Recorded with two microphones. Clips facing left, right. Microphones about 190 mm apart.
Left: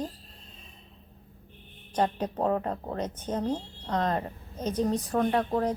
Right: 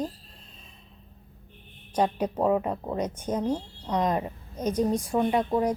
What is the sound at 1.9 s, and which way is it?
Speech, 10° right (ahead or behind).